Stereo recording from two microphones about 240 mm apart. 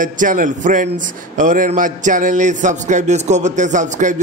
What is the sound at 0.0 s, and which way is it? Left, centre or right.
A man's voice, right.